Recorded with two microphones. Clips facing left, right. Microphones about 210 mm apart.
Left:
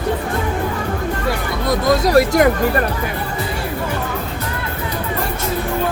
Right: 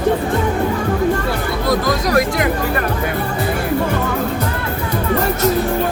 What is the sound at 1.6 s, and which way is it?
Music, 30° left (ahead or behind).